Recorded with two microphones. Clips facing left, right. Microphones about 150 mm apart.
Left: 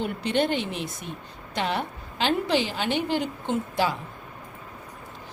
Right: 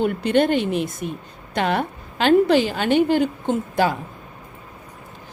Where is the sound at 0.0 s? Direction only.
50° right (ahead or behind).